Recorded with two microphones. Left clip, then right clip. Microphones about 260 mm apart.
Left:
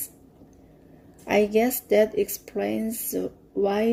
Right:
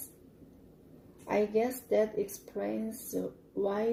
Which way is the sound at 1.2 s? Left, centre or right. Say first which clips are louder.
Left 8 dB; left.